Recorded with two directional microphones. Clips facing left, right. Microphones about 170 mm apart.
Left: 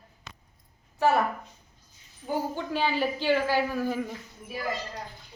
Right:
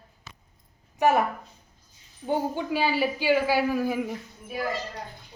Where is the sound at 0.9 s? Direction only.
15° right (ahead or behind).